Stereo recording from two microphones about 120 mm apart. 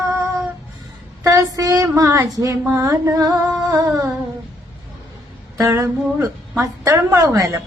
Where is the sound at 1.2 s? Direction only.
30° right (ahead or behind).